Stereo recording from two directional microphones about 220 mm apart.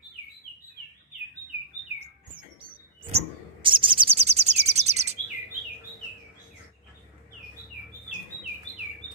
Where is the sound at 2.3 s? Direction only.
25° right (ahead or behind).